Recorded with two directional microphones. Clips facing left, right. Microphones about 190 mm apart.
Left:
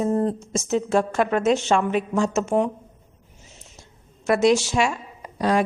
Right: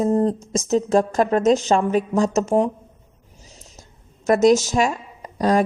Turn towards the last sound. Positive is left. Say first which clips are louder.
# right 3 dB
turn(degrees=-40)  # may be behind; listen again after turning